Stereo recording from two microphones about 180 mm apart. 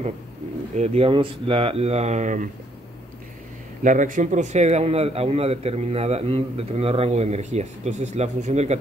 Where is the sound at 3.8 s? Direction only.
45° right (ahead or behind).